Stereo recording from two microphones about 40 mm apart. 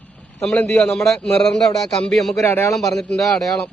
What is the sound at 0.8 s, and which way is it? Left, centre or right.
Speech, centre.